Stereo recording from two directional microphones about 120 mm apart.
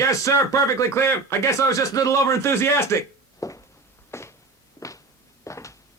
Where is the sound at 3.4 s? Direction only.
25° left (ahead or behind).